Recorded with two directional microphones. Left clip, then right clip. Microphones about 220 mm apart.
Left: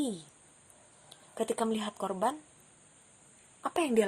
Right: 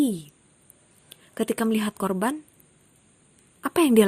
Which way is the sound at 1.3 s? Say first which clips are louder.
Right 6 dB; 35° right (ahead or behind).